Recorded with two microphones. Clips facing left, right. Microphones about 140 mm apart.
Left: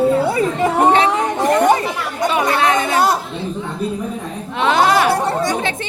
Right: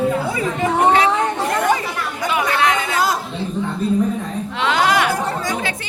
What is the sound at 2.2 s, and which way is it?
Chatter, 30° left (ahead or behind).